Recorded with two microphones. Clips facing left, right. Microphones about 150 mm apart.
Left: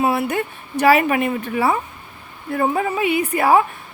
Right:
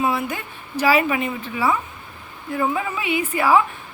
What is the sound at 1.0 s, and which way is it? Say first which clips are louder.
Speech: left 4 dB; 50° left (ahead or behind).